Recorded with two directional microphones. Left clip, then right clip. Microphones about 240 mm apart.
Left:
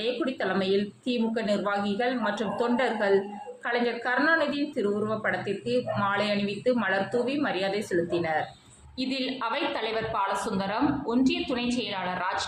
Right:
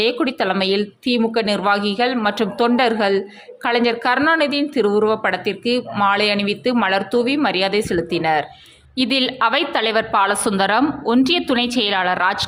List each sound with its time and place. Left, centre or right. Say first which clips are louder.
0.0 s a woman's voice: right 10 dB; right